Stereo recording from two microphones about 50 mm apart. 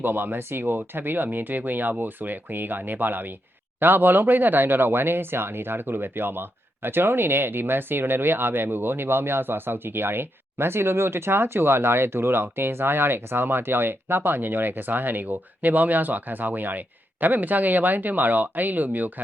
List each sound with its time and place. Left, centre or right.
0.0 s speech: right